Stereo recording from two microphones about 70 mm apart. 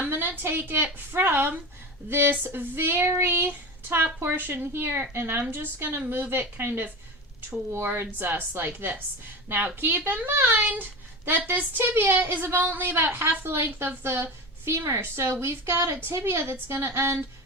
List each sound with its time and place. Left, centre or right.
0.1 s a woman's voice: right
8.2 s speech: right